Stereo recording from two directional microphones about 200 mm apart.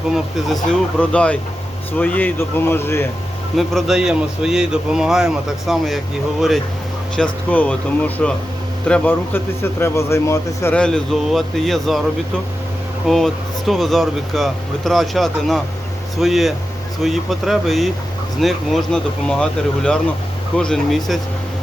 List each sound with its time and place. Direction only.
0.3 s a man's voice: centre (ahead or behind)
3.6 s a man's voice: centre (ahead or behind)
7.2 s a man's voice: 5° left (ahead or behind)
13.1 s a man's voice: centre (ahead or behind)